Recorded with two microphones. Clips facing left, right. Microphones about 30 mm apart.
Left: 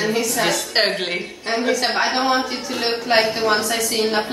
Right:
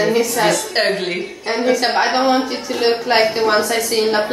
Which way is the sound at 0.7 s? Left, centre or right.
Centre.